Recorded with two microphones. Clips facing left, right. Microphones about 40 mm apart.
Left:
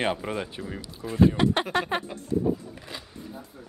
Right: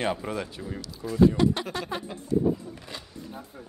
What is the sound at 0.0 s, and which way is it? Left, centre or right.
Speech, centre.